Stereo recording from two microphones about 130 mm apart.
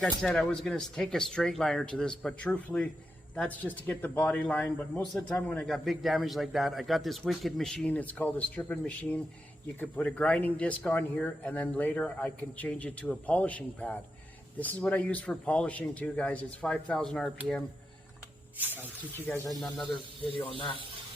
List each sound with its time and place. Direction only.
0.0 s speech: 5° left (ahead or behind)
19.5 s speech: centre (ahead or behind)
20.4 s speech: 45° left (ahead or behind)